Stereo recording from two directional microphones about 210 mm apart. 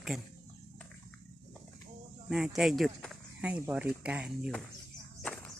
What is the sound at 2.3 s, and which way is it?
Speech, centre (ahead or behind).